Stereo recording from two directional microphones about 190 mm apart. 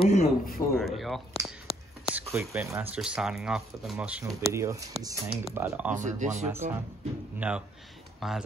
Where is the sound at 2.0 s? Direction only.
5° right (ahead or behind).